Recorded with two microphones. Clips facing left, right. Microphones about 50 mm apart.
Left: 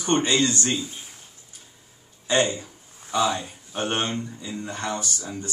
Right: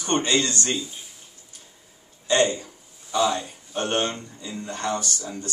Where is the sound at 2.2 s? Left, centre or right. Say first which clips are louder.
Right 1 dB; centre.